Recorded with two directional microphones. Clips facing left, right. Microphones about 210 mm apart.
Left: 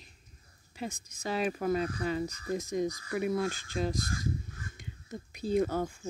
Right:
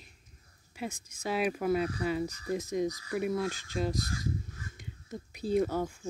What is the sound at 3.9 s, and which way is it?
Speech, 50° left (ahead or behind).